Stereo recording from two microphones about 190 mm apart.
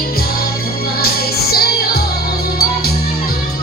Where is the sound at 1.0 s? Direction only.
55° left (ahead or behind).